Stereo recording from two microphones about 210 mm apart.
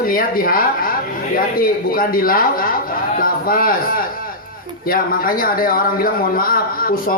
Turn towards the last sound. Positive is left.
turn(degrees=45)  # may be behind; listen again after turning